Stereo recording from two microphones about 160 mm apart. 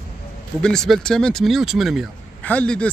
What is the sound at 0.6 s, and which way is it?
Speech, 5° left (ahead or behind).